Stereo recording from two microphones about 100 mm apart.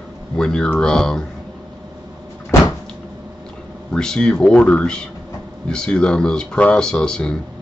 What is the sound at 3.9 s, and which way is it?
Speech, 5° left (ahead or behind).